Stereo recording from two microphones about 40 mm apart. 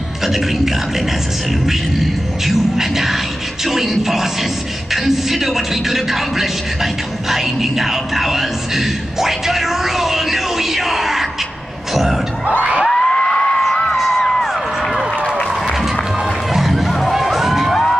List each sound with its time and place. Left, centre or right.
1.7 s a man's voice: centre
12.8 s a sound: centre
14.1 s music: centre
16.5 s music: centre